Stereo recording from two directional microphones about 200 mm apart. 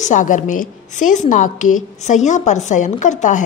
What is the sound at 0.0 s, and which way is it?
A woman's voice, 40° left (ahead or behind).